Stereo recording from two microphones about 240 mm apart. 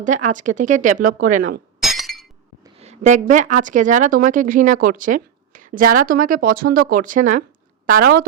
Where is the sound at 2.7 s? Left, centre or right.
Right.